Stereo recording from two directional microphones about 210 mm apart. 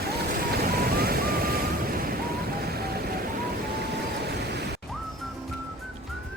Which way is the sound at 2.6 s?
45° right (ahead or behind).